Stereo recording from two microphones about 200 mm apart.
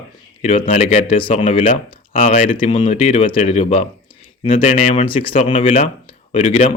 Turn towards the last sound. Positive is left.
turn(degrees=35)  # may be behind; listen again after turning